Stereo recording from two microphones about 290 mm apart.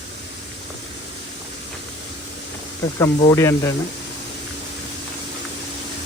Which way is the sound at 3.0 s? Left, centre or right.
Centre.